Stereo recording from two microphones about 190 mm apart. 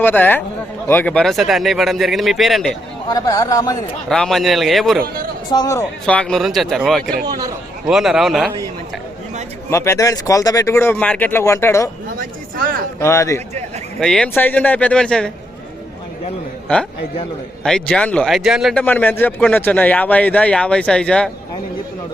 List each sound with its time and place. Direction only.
0.0 s a man's voice: 10° left (ahead or behind)
3.1 s speech: 20° left (ahead or behind)
4.1 s a man's voice: centre (ahead or behind)
5.5 s speech: 20° left (ahead or behind)
6.1 s a man's voice: 5° left (ahead or behind)
9.6 s speech: 15° left (ahead or behind)
12.2 s a sound: 50° right (ahead or behind)
13.0 s speech: 15° left (ahead or behind)
14.0 s speech: 5° left (ahead or behind)
17.6 s speech: 5° left (ahead or behind)